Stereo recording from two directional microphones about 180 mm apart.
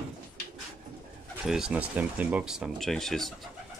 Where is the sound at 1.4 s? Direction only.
5° right (ahead or behind).